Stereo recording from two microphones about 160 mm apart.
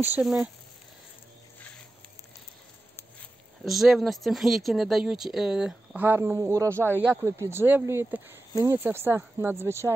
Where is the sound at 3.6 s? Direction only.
Centre (ahead or behind); by 6.7 s 20° right (ahead or behind).